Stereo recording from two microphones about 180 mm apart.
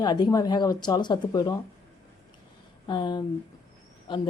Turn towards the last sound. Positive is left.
turn(degrees=25)  # may be behind; listen again after turning